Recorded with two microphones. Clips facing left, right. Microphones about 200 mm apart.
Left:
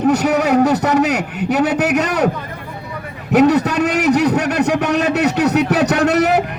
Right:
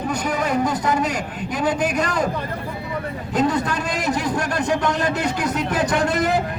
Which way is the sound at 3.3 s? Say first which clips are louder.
Left 9 dB; 70° left (ahead or behind).